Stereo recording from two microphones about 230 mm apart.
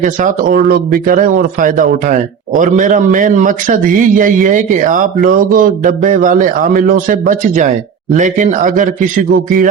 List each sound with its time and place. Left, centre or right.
0.0 s a man's voice: right